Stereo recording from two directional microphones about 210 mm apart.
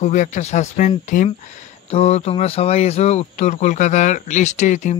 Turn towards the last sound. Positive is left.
turn(degrees=35)  # may be behind; listen again after turning